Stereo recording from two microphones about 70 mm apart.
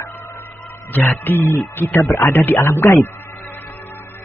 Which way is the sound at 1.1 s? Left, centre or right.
Left.